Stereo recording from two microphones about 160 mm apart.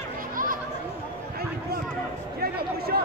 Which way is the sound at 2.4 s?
70° right (ahead or behind).